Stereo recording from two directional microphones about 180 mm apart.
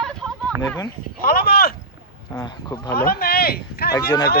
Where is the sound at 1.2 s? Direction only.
55° left (ahead or behind).